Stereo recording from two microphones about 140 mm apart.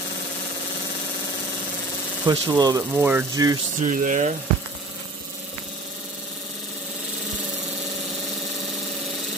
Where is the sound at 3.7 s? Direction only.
65° right (ahead or behind).